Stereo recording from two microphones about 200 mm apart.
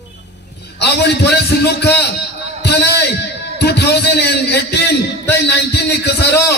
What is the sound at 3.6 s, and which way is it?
A man's voice, 55° left (ahead or behind).